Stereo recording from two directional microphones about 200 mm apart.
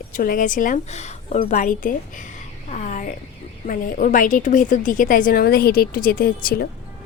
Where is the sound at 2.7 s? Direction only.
35° left (ahead or behind).